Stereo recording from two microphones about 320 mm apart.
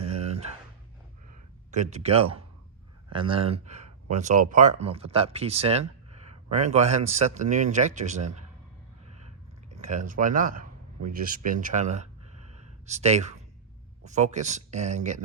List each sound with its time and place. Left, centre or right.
0.0 s a sound: centre
1.7 s a man's voice: right
9.6 s a man's voice: right